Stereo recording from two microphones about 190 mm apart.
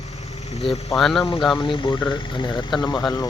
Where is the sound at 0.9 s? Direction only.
Centre (ahead or behind).